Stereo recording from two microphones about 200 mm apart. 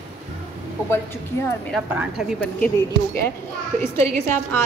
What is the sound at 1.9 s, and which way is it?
Speech, 5° right (ahead or behind).